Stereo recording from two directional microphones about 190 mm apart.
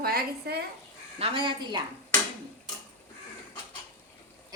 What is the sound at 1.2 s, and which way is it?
Speech, 25° right (ahead or behind).